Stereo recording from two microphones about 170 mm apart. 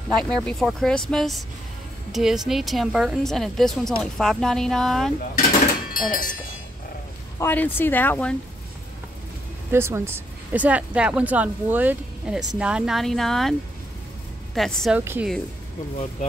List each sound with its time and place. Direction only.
0.2 s a woman's voice: 5° left (ahead or behind)
5.9 s speech: 55° left (ahead or behind)
7.3 s speech: 10° left (ahead or behind)
9.7 s a woman's voice: 15° right (ahead or behind); by 15.0 s centre (ahead or behind)
15.0 s speech: 10° right (ahead or behind)